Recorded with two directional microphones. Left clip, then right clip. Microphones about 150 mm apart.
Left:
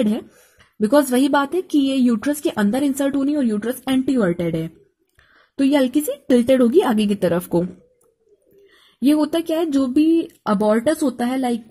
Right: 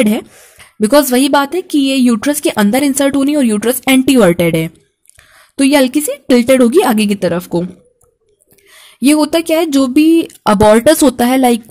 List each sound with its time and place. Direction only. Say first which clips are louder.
0.0 s a woman's voice: right 8 dB; 10° right (ahead or behind)
8.8 s speech: right 7 dB; 10° right (ahead or behind)
10.4 s speech: right 13 dB; 20° right (ahead or behind)